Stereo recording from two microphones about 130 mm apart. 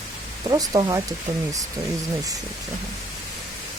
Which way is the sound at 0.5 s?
30° right (ahead or behind).